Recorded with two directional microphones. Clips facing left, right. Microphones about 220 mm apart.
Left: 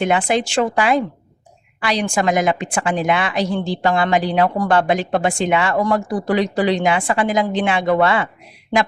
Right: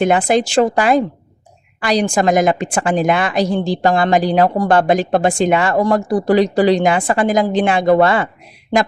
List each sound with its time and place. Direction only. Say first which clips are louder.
0.0 s a woman's voice: right 4 dB; 40° right (ahead or behind)